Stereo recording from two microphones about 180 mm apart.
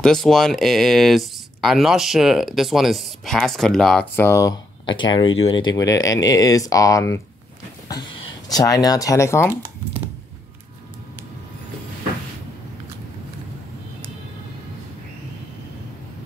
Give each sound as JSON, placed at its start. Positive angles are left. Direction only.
{"t": 0.0, "sound": "speech", "side_deg": 0}